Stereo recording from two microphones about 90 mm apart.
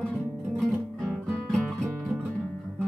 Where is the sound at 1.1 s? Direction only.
5° left (ahead or behind).